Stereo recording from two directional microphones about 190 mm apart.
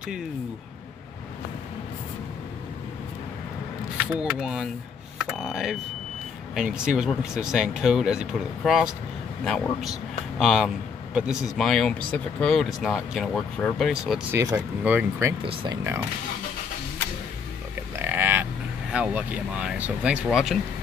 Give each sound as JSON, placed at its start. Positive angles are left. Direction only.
{"t": 4.1, "sound": "speech", "side_deg": -5}
{"t": 14.3, "sound": "speech", "side_deg": -15}
{"t": 15.4, "sound": "speech", "side_deg": -25}
{"t": 17.9, "sound": "speech", "side_deg": -10}